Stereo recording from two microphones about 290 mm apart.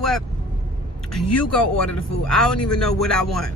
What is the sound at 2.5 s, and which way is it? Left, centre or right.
Speech, left.